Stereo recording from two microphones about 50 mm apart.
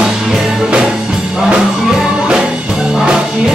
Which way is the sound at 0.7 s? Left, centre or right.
Centre.